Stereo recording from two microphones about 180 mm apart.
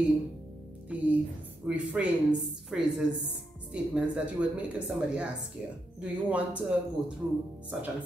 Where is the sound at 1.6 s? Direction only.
5° right (ahead or behind).